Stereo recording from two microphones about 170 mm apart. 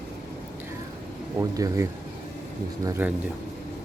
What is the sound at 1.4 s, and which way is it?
Speech, 20° right (ahead or behind).